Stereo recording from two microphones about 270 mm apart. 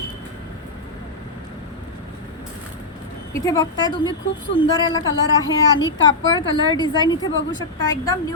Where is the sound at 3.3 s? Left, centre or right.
Centre.